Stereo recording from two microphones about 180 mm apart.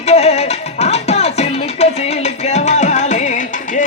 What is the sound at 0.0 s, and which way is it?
Music, 35° left (ahead or behind).